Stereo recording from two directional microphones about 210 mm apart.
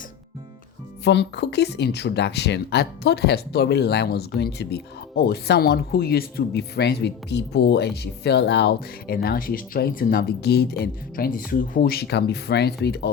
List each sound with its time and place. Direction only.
1.0 s speech: 55° left (ahead or behind)